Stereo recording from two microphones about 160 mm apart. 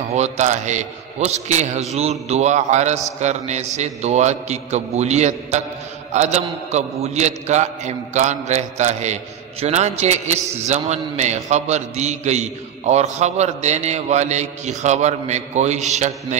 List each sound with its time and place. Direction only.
0.1 s a man's voice: 45° right (ahead or behind)